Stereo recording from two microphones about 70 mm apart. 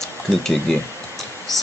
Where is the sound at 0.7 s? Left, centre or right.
Centre.